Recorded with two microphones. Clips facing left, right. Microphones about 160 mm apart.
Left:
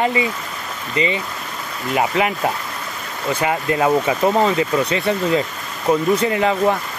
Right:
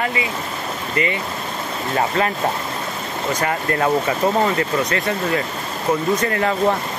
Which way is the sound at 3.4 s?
15° left (ahead or behind).